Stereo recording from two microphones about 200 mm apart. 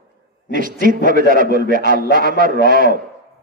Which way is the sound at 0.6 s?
45° right (ahead or behind).